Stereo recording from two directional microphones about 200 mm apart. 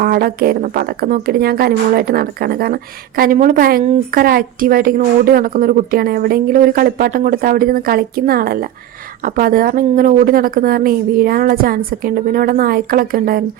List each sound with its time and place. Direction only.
0.0 s a woman's voice: 50° right (ahead or behind)